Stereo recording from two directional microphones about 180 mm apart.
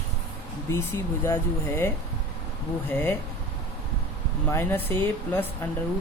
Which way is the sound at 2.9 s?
10° left (ahead or behind).